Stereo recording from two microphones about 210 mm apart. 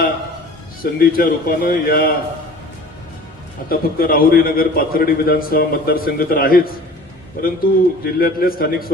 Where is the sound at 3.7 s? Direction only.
45° left (ahead or behind).